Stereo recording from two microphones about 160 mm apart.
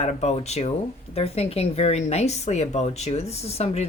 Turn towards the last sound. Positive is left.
turn(degrees=40)  # may be behind; listen again after turning